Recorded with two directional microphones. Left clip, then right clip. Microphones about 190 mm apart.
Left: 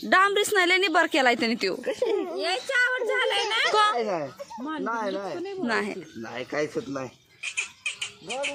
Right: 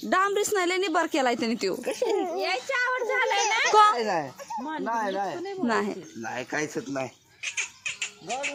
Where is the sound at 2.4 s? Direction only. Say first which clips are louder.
Left 2 dB; 55° left (ahead or behind).